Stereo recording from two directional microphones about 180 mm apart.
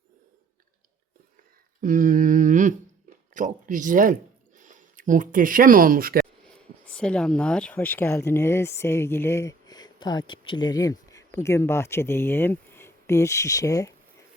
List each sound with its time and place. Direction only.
1.8 s a sound: 45° right (ahead or behind)
3.3 s speech: 45° right (ahead or behind)
6.8 s speech: 5° left (ahead or behind)